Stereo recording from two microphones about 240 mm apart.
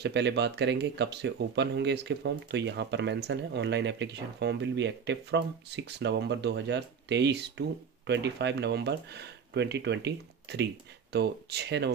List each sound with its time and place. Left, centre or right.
0.0 s speech: right